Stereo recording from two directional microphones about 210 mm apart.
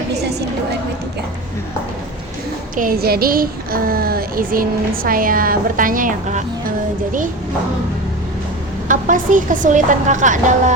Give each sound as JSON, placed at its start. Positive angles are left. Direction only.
{"t": 0.2, "sound": "speech", "side_deg": -50}
{"t": 2.7, "sound": "a woman's voice", "side_deg": -45}
{"t": 8.9, "sound": "a woman's voice", "side_deg": -40}